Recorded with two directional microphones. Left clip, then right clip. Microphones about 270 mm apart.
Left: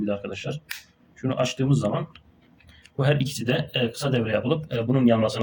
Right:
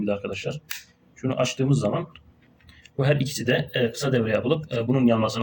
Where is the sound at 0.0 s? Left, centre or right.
Centre.